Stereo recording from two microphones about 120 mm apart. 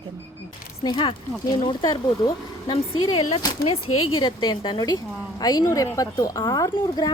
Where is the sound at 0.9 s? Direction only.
40° left (ahead or behind).